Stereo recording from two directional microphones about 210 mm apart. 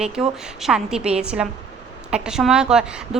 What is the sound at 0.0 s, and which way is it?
A woman's voice, 5° right (ahead or behind).